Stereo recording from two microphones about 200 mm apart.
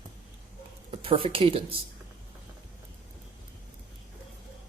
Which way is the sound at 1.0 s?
25° right (ahead or behind).